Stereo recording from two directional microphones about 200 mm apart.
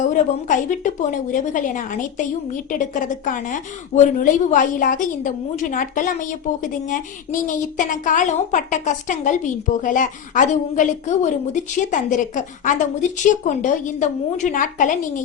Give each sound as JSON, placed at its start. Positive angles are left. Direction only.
{"t": 0.1, "sound": "a woman's voice", "side_deg": 40}